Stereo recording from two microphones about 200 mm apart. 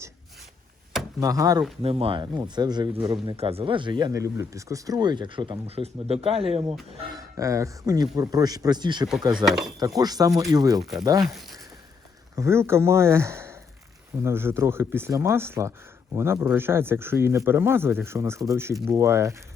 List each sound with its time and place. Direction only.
1.2 s speech: 15° right (ahead or behind)
1.8 s speech: 30° right (ahead or behind)
7.2 s speech: 15° right (ahead or behind)
9.4 s speech: centre (ahead or behind)
9.8 s speech: 20° right (ahead or behind)
12.4 s speech: 15° right (ahead or behind)